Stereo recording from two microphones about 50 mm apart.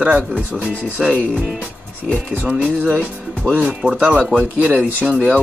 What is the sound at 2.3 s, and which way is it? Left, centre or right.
Speech, right.